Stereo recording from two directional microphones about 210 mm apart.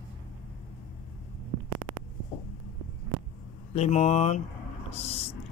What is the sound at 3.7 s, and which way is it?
Speech, 30° left (ahead or behind).